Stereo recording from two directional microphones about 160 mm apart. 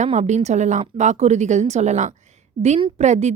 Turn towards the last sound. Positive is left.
turn(degrees=-45)  # may be behind; listen again after turning